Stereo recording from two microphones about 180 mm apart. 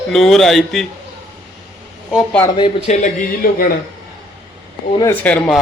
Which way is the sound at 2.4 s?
25° left (ahead or behind).